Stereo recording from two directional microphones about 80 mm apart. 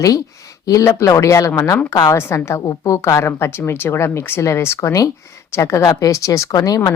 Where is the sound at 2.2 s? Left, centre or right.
Left.